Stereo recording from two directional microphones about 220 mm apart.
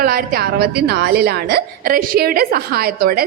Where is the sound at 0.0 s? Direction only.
40° right (ahead or behind).